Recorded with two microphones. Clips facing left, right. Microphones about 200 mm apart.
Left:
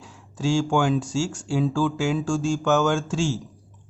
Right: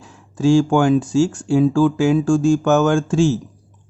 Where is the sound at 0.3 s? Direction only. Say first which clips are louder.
Right 8 dB; 55° right (ahead or behind).